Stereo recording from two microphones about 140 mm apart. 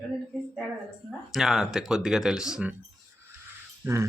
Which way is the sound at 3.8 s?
20° right (ahead or behind).